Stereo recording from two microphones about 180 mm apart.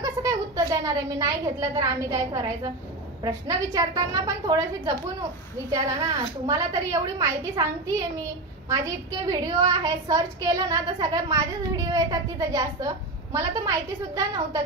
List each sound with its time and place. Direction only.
0.0 s a woman's voice: 20° right (ahead or behind)
6.4 s a woman's voice: 20° right (ahead or behind)
8.6 s a woman's voice: 20° right (ahead or behind)